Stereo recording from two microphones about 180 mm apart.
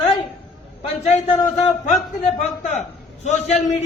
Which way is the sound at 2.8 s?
40° left (ahead or behind).